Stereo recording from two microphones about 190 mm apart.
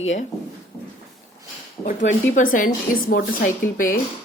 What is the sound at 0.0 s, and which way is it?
Speech, 40° left (ahead or behind).